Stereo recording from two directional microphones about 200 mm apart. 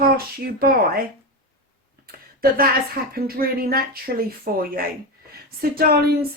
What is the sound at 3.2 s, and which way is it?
A woman's voice, 50° right (ahead or behind).